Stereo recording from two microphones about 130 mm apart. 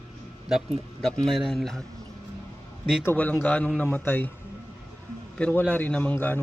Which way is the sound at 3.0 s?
15° left (ahead or behind).